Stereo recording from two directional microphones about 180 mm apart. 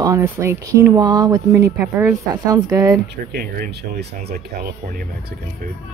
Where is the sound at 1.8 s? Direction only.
10° right (ahead or behind).